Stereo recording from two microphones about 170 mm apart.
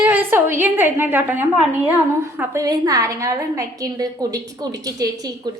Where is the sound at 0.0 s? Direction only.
10° right (ahead or behind).